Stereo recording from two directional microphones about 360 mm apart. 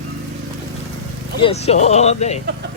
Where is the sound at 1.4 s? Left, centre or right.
Centre.